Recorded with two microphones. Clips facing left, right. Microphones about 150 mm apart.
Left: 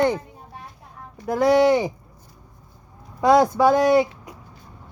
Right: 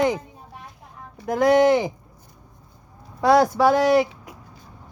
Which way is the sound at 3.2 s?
15° left (ahead or behind).